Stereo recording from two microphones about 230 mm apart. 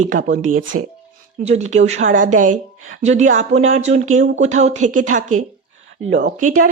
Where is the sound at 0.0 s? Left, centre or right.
Right.